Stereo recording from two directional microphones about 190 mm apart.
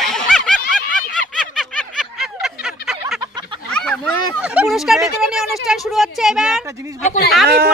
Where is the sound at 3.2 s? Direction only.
25° right (ahead or behind).